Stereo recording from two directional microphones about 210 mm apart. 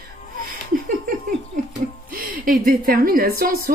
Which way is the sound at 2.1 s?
40° right (ahead or behind).